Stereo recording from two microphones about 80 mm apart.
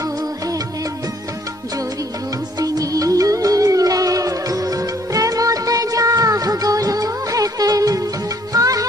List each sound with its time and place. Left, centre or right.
2.6 s music: right